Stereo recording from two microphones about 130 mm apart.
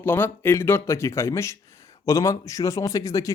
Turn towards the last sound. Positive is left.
turn(degrees=25)  # may be behind; listen again after turning